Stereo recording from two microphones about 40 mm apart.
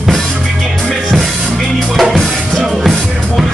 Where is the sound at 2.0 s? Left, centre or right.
Centre.